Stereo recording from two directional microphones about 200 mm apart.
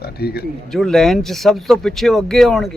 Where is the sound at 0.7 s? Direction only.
Centre (ahead or behind).